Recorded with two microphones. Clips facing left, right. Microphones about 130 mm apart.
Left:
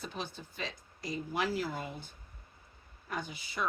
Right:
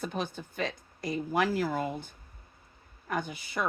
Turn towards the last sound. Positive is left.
turn(degrees=-55)  # may be behind; listen again after turning